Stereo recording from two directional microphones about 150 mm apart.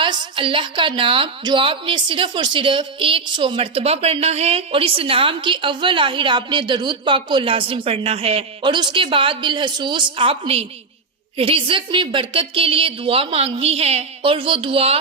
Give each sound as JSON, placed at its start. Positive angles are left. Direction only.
{"t": 0.0, "sound": "a woman's voice", "side_deg": -30}